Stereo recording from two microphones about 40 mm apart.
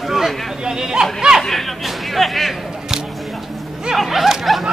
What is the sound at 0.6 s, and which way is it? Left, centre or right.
Speech, centre.